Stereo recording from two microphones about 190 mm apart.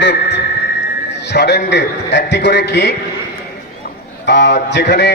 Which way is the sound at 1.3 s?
60° left (ahead or behind).